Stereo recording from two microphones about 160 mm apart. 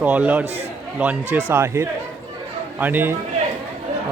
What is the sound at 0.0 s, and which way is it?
A man's voice, 10° right (ahead or behind).